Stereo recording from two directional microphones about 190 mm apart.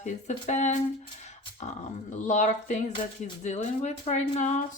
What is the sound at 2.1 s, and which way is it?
Speech, 40° left (ahead or behind).